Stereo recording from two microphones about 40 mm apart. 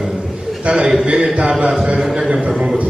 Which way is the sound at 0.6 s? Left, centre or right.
Right.